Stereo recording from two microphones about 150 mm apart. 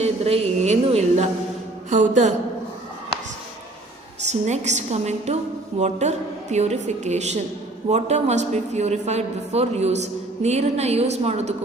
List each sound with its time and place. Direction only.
0.0 s a woman's voice: 45° right (ahead or behind)
1.9 s a woman's voice: 55° right (ahead or behind)
4.3 s a woman's voice: 50° right (ahead or behind)